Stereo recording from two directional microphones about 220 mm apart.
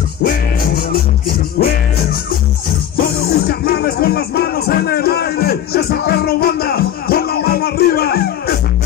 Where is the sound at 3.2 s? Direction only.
45° left (ahead or behind).